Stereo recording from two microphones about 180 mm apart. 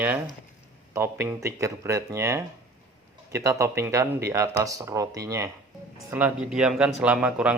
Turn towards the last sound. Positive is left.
turn(degrees=-5)  # may be behind; listen again after turning